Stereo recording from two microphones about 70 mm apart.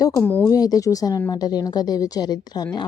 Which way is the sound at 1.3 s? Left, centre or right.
Left.